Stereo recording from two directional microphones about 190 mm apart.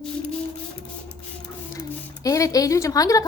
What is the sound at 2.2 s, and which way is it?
Speech, 15° left (ahead or behind).